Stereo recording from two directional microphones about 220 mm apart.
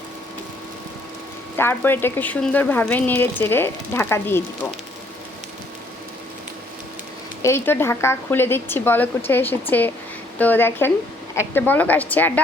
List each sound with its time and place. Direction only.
1.5 s a woman's voice: 10° left (ahead or behind)
7.4 s a woman's voice: 10° left (ahead or behind)